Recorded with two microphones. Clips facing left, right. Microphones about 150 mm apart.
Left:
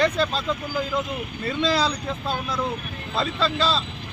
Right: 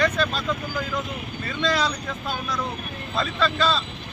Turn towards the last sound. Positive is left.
turn(degrees=30)  # may be behind; listen again after turning